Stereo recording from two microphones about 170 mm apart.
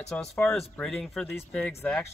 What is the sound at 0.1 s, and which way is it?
Speech, 5° left (ahead or behind).